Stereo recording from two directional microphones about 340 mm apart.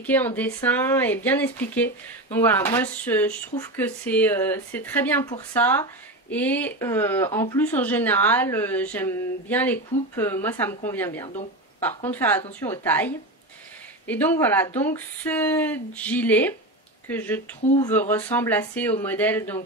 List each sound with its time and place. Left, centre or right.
0.0 s speech: centre
17.6 s speech: centre
17.9 s speech: centre